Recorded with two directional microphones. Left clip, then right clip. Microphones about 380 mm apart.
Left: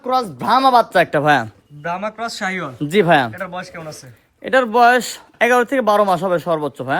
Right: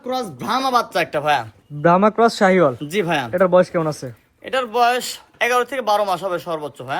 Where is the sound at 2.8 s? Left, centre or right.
Left.